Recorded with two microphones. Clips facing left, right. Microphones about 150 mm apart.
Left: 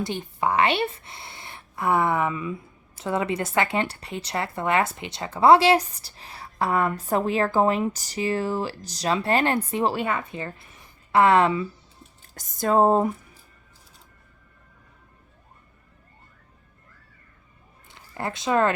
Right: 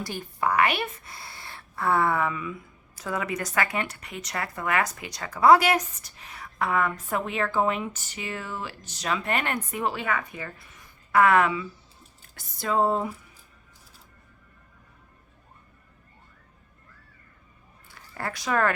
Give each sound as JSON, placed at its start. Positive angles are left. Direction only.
{"t": 0.0, "sound": "a woman's voice", "side_deg": 20}
{"t": 12.3, "sound": "speech", "side_deg": 40}
{"t": 17.9, "sound": "speech", "side_deg": 20}